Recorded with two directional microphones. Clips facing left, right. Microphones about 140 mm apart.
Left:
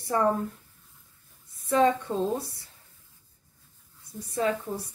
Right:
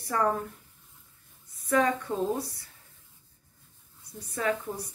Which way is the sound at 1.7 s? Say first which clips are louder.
Left 3 dB; 25° left (ahead or behind).